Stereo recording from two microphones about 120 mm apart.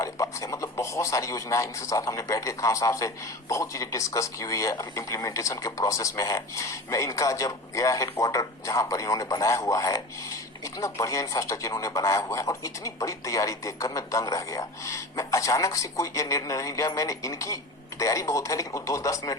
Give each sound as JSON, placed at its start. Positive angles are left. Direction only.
{"t": 0.0, "sound": "speech", "side_deg": 25}